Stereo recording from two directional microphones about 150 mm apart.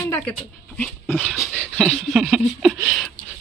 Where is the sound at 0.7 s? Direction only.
10° left (ahead or behind).